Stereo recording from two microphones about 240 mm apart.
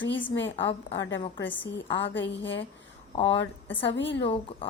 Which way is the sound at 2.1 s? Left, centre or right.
Left.